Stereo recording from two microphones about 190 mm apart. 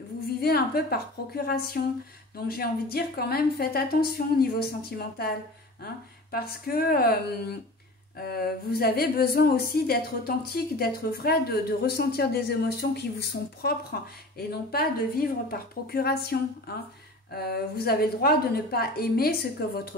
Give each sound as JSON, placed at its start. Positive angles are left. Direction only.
{"t": 0.4, "sound": "a woman's voice", "side_deg": 55}
{"t": 6.3, "sound": "a woman's voice", "side_deg": 50}